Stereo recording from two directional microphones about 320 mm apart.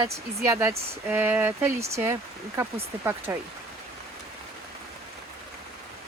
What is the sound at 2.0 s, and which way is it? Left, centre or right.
Speech, centre.